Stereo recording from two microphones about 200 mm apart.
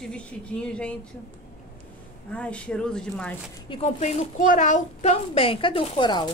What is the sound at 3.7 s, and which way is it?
Speech, 35° left (ahead or behind).